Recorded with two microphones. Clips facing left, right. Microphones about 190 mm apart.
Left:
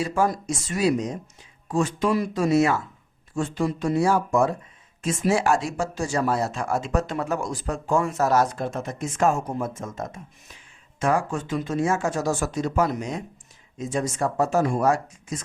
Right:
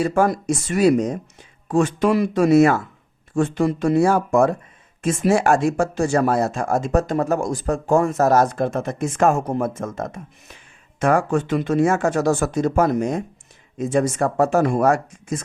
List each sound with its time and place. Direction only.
0.0 s speech: 60° right (ahead or behind)
13.7 s speech: 60° right (ahead or behind)